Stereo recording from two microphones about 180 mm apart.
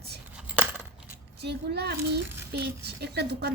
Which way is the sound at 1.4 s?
65° right (ahead or behind).